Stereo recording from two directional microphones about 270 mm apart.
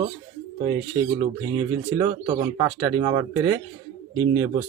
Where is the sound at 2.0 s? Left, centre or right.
Centre.